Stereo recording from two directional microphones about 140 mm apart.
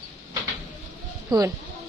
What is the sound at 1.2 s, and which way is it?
Speech, 25° right (ahead or behind).